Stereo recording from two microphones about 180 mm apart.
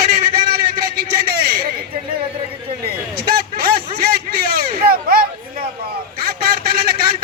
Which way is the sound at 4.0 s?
55° right (ahead or behind).